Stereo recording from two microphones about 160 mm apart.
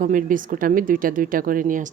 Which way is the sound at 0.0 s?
55° right (ahead or behind).